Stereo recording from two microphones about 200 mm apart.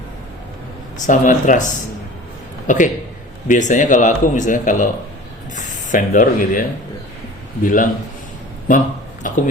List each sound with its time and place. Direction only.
1.0 s a man's voice: 40° left (ahead or behind)